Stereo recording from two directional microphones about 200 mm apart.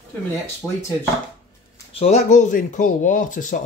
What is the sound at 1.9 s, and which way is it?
Speech, 35° left (ahead or behind).